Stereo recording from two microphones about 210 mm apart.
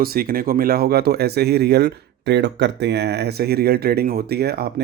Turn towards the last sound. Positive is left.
turn(degrees=-50)  # may be behind; listen again after turning